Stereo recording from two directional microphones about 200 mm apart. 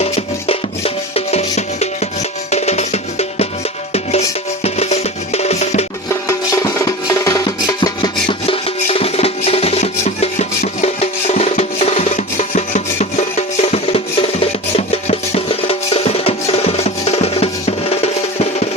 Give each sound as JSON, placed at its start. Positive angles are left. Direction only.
{"t": 1.1, "sound": "music", "side_deg": 35}
{"t": 4.6, "sound": "music", "side_deg": 30}
{"t": 6.1, "sound": "music", "side_deg": 15}